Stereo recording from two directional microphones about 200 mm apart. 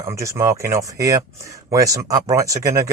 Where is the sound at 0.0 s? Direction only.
15° right (ahead or behind).